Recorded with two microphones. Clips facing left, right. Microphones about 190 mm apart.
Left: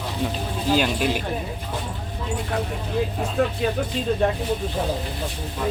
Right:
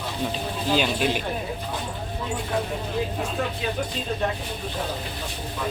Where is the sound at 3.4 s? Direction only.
55° left (ahead or behind).